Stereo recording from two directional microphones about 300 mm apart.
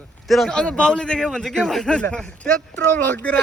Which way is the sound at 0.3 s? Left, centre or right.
Centre.